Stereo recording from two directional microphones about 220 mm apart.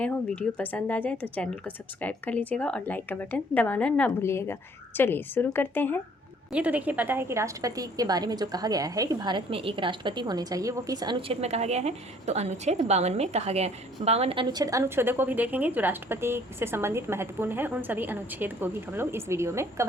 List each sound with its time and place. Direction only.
0.0 s speech: 5° left (ahead or behind)
6.5 s a woman's voice: 5° right (ahead or behind)